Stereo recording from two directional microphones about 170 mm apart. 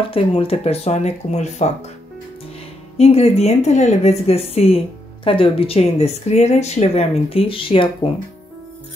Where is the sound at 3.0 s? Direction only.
35° left (ahead or behind).